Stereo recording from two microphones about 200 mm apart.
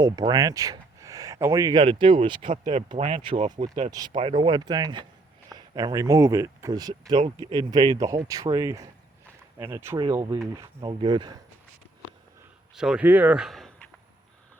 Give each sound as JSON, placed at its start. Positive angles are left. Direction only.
{"t": 0.0, "sound": "speech", "side_deg": -20}
{"t": 12.7, "sound": "speech", "side_deg": -5}